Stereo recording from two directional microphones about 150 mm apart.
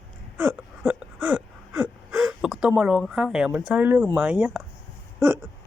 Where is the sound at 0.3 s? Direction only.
10° right (ahead or behind).